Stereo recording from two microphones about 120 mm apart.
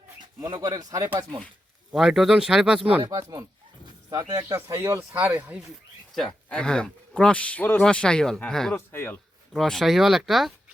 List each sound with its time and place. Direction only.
0.4 s speech: 30° right (ahead or behind)
1.9 s speech: 5° right (ahead or behind)
3.1 s speech: 25° right (ahead or behind); by 5.6 s 10° right (ahead or behind)
6.1 s speech: 5° left (ahead or behind)
8.7 s speech: 15° left (ahead or behind)
9.6 s speech: 5° left (ahead or behind)